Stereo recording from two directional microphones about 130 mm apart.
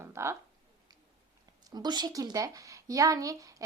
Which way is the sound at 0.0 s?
20° right (ahead or behind).